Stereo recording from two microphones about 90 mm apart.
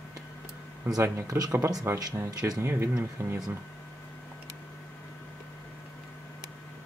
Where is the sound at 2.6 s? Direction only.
30° right (ahead or behind).